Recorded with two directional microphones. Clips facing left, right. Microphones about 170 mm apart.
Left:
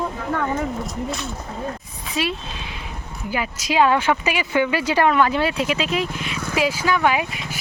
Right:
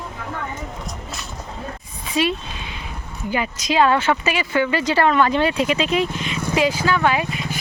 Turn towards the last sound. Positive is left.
turn(degrees=10)  # may be behind; listen again after turning